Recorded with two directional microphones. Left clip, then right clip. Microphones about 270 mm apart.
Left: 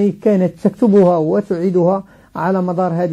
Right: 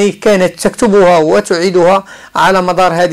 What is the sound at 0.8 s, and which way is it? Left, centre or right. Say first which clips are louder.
A man's voice: right 5 dB; right.